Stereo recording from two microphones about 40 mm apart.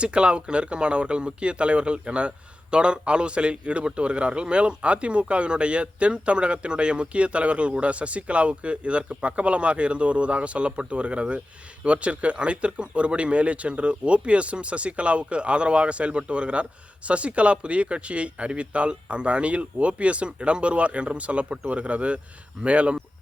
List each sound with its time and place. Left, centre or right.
0.0 s a man's voice: right